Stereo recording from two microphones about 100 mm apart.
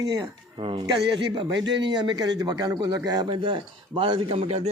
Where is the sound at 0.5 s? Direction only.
60° right (ahead or behind).